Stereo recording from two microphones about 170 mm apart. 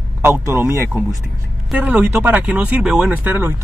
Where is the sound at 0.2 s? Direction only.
15° right (ahead or behind).